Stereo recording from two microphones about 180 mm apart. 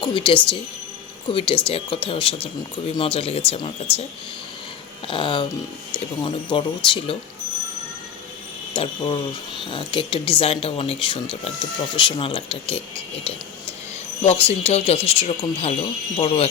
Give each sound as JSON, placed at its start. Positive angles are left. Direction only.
{"t": 0.0, "sound": "speech", "side_deg": 30}
{"t": 5.0, "sound": "speech", "side_deg": 30}
{"t": 8.7, "sound": "speech", "side_deg": 30}
{"t": 14.2, "sound": "speech", "side_deg": 35}